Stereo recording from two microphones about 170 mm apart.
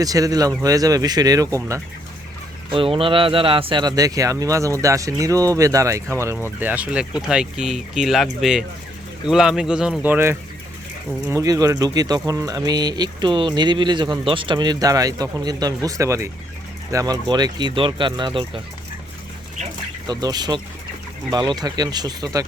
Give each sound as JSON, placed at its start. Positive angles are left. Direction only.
{"t": 0.0, "sound": "speech", "side_deg": -20}
{"t": 2.6, "sound": "speech", "side_deg": -30}
{"t": 20.1, "sound": "speech", "side_deg": -25}